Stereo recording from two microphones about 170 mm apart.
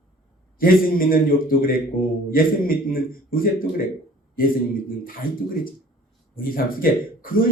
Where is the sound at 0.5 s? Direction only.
55° left (ahead or behind).